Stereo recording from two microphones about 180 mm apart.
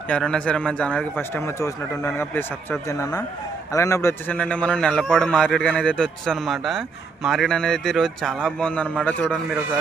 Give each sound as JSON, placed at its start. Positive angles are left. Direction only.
{"t": 0.1, "sound": "a man's voice", "side_deg": 5}